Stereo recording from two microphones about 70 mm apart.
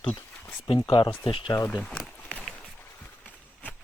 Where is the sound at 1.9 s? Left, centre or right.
Centre.